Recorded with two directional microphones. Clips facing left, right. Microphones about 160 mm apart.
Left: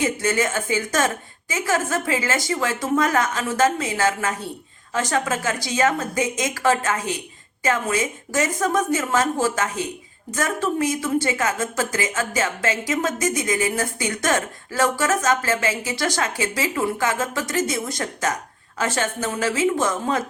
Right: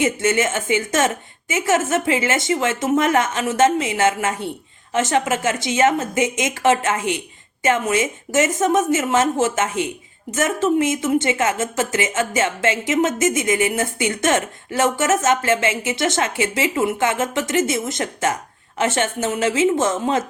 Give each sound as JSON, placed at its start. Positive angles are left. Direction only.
{"t": 0.0, "sound": "speech", "side_deg": -25}